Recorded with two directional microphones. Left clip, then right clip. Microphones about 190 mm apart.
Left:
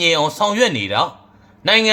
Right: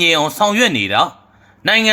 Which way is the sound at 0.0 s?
15° right (ahead or behind).